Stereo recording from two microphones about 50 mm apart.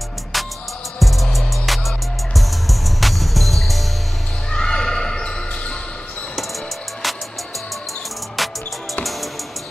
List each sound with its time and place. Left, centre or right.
0.9 s music: centre
4.5 s basketball bounce: centre
8.4 s music: centre